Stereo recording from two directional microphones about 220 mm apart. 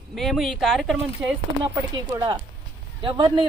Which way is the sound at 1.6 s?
15° right (ahead or behind).